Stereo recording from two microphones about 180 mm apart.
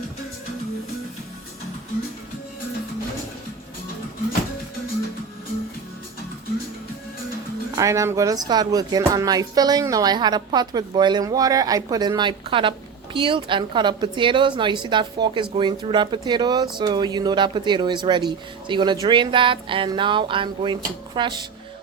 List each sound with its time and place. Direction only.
7.8 s speech: 15° right (ahead or behind)